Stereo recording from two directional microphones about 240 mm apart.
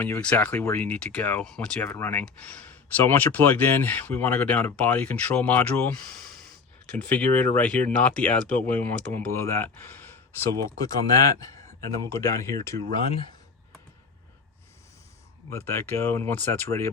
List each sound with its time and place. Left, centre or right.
0.0 s speech: centre
15.4 s speech: centre